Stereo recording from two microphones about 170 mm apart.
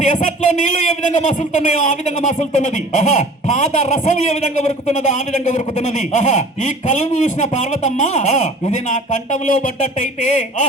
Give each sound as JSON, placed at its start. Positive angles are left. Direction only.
{"t": 0.0, "sound": "speech", "side_deg": 45}